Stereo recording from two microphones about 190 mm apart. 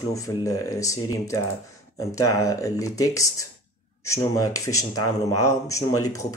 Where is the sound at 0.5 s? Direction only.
20° left (ahead or behind).